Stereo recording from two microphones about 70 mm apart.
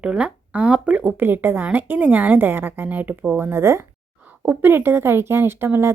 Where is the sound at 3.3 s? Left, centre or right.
Right.